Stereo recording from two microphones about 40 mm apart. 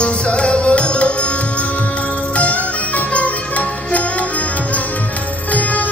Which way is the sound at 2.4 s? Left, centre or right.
Left.